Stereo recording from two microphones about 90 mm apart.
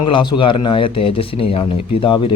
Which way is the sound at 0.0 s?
70° left (ahead or behind).